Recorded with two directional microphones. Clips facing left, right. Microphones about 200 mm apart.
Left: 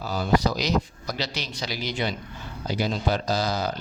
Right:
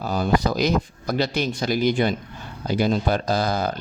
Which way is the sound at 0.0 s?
50° right (ahead or behind).